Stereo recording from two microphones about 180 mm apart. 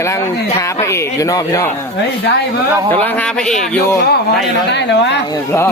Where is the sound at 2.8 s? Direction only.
10° left (ahead or behind).